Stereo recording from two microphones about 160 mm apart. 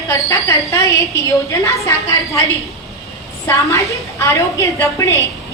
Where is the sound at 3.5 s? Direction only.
20° left (ahead or behind).